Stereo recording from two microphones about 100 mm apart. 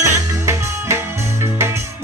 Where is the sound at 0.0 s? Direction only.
30° right (ahead or behind).